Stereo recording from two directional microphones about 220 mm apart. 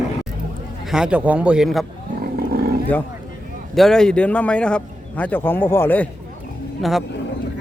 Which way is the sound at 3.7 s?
Centre (ahead or behind).